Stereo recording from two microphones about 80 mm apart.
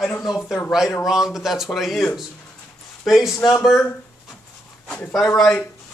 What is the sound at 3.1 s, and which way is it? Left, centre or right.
Speech, centre.